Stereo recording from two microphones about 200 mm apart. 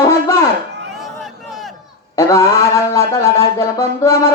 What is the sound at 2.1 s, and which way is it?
Speech, 15° left (ahead or behind).